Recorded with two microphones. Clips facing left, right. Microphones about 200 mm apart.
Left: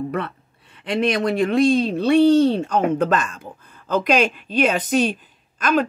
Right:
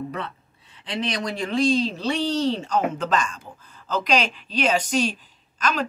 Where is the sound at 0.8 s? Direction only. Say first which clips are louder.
Left 8 dB; 55° left (ahead or behind).